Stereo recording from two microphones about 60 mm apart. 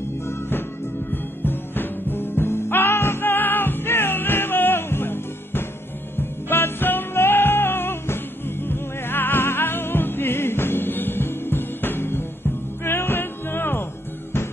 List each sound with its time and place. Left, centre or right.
0.3 s music: left